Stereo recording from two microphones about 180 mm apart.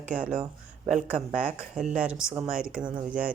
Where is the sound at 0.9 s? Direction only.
45° right (ahead or behind).